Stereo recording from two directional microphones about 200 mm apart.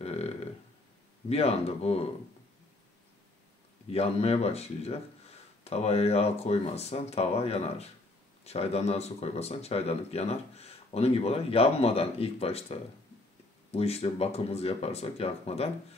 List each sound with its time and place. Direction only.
0.0 s a sound: 30° left (ahead or behind)
1.3 s speech: 30° left (ahead or behind)
3.9 s speech: 30° left (ahead or behind)